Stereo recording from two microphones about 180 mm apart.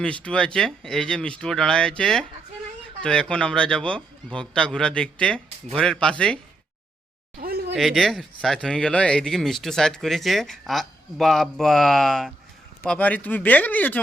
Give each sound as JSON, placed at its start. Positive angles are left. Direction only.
{"t": 0.0, "sound": "speech", "side_deg": 5}
{"t": 7.3, "sound": "a sound", "side_deg": -55}
{"t": 7.8, "sound": "speech", "side_deg": 0}